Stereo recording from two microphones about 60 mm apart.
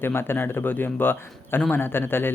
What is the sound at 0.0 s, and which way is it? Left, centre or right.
A man's voice, left.